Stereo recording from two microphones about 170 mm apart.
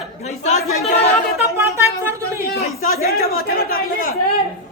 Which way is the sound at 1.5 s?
15° right (ahead or behind).